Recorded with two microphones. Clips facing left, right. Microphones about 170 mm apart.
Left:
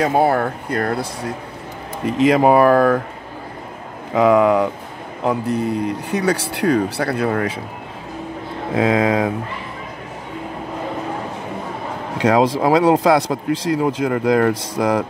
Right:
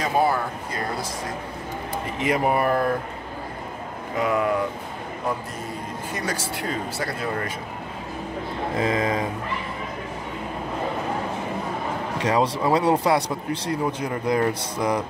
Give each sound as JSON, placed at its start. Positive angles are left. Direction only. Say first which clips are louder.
{"t": 0.0, "sound": "speech", "louder": "left 6 dB", "side_deg": 60}
{"t": 2.1, "sound": "speech", "louder": "left 9 dB", "side_deg": 85}
{"t": 4.1, "sound": "speech", "louder": "left 9 dB", "side_deg": 90}
{"t": 5.2, "sound": "speech", "louder": "left 11 dB", "side_deg": 70}
{"t": 8.7, "sound": "speech", "louder": "left 8 dB", "side_deg": 90}
{"t": 12.3, "sound": "speech", "louder": "left 6 dB", "side_deg": 90}